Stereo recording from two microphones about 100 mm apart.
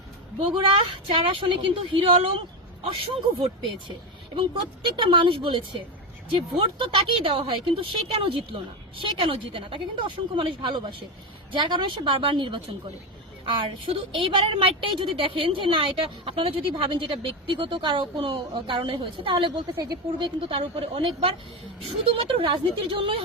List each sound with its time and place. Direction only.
0.3 s a woman's voice: 60° right (ahead or behind)
13.8 s a woman's voice: 55° right (ahead or behind)
20.1 s a woman's voice: 60° right (ahead or behind)